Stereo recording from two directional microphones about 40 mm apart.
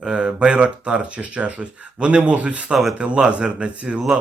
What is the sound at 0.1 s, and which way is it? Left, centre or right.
A man's voice, right.